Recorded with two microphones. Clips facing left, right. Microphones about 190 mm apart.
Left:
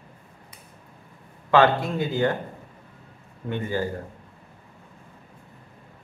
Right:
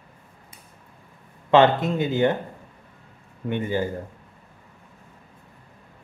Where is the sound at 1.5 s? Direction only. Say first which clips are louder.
Right 2 dB; 20° right (ahead or behind).